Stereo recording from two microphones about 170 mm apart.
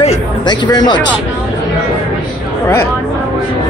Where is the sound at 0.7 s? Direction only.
25° left (ahead or behind).